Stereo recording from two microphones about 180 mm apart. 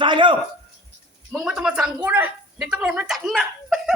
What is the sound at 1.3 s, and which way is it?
Speech, 5° right (ahead or behind).